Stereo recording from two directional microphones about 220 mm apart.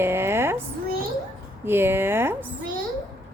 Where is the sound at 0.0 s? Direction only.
10° right (ahead or behind).